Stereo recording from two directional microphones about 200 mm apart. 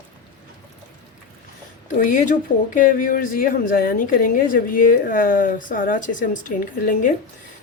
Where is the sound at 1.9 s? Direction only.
45° left (ahead or behind).